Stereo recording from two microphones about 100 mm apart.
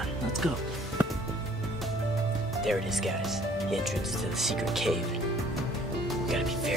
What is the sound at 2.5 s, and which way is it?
Speech, centre (ahead or behind).